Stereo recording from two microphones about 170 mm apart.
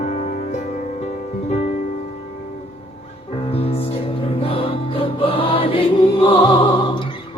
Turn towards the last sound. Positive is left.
turn(degrees=30)  # may be behind; listen again after turning